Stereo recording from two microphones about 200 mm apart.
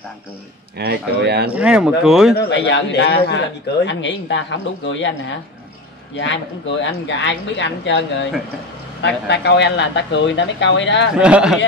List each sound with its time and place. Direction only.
0.7 s speech: 55° right (ahead or behind)
1.5 s speech: 5° right (ahead or behind)
2.3 s a man's voice: 65° left (ahead or behind)
6.8 s a man's voice: 65° left (ahead or behind)
11.1 s speech: 5° right (ahead or behind)